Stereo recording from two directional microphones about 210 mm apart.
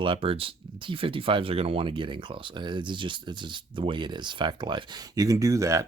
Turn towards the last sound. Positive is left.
turn(degrees=-15)  # may be behind; listen again after turning